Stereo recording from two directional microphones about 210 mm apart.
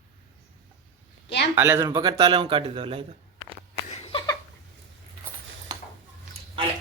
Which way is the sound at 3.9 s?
30° left (ahead or behind).